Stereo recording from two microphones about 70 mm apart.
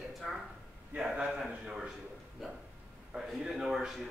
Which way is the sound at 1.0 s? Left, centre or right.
Centre.